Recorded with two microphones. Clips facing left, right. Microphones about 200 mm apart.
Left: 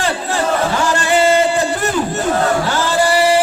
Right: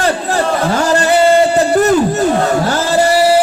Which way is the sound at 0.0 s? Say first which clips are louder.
Right 4 dB; 40° right (ahead or behind).